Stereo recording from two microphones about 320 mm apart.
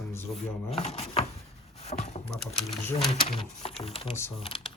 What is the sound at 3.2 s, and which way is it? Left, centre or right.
Speech, centre.